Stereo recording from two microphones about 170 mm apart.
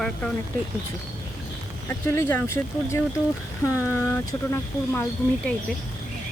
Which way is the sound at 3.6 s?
15° left (ahead or behind).